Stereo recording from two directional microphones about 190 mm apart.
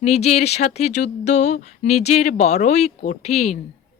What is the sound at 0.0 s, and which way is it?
Speech, 35° left (ahead or behind).